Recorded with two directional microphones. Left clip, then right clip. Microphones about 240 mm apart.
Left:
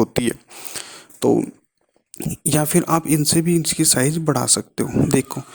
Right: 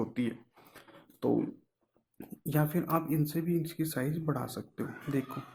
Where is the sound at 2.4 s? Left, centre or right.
Left.